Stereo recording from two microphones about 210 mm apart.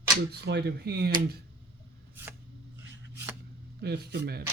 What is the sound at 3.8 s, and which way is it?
Speech, 50° right (ahead or behind).